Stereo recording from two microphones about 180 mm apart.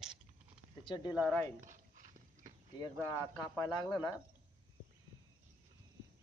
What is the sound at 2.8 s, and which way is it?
Speech, 20° left (ahead or behind).